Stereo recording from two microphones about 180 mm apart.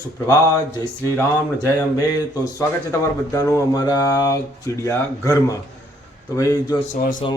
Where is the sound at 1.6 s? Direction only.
20° left (ahead or behind).